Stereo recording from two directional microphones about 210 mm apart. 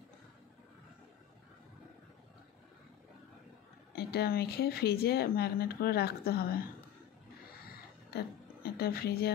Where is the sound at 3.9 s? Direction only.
50° left (ahead or behind).